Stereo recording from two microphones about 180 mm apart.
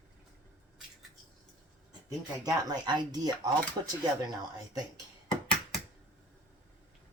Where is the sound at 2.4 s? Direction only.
20° right (ahead or behind).